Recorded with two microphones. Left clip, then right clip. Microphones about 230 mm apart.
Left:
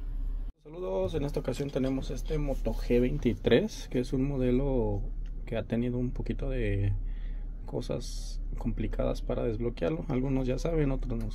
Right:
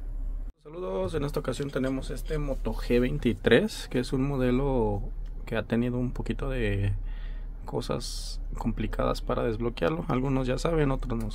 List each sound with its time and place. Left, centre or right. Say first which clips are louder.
0.7 s speech: even; right